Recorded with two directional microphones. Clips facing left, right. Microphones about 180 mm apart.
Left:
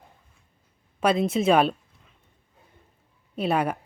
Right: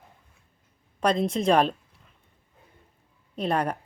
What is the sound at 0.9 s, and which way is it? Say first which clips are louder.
Speech: left 2 dB; 5° left (ahead or behind).